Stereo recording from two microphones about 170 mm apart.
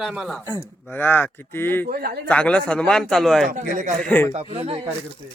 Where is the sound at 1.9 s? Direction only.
65° right (ahead or behind).